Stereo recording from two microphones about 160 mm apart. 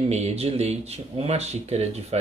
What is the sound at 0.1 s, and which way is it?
Speech, 45° right (ahead or behind).